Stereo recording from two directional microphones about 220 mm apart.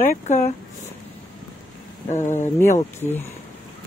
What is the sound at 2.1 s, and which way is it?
Speech, 30° left (ahead or behind).